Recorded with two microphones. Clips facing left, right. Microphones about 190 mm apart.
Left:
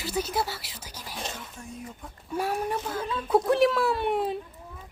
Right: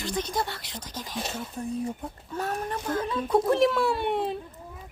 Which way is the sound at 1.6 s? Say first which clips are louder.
Right 10 dB; 35° right (ahead or behind).